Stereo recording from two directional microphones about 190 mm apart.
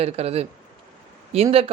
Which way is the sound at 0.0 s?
35° right (ahead or behind).